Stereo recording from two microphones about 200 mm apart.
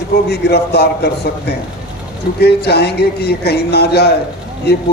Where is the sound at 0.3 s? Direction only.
55° left (ahead or behind).